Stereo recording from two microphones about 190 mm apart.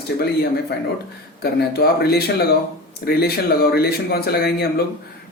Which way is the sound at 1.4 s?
55° left (ahead or behind).